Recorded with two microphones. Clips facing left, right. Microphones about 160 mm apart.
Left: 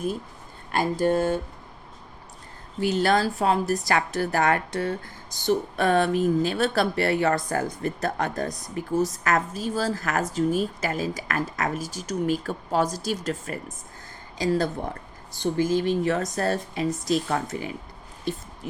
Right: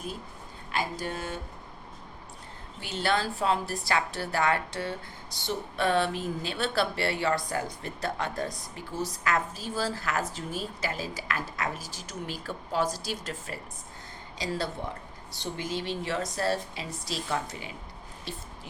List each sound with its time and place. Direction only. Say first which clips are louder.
0.7 s speech: left 10 dB; 50° left (ahead or behind)
2.8 s speech: left 7 dB; 40° left (ahead or behind)